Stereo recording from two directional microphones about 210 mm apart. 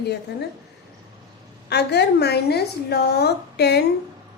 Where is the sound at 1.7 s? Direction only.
50° left (ahead or behind).